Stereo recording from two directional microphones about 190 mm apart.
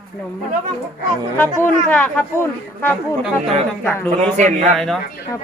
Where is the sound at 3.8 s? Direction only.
10° left (ahead or behind).